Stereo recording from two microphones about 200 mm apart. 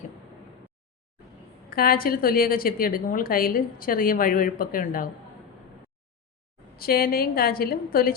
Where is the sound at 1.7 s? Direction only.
45° left (ahead or behind).